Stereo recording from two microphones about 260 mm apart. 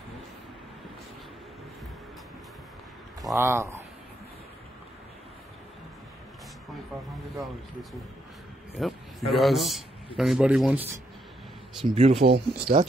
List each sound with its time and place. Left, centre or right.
3.3 s speech: centre
8.7 s a man's voice: centre
11.9 s speech: right
12.4 s speech: right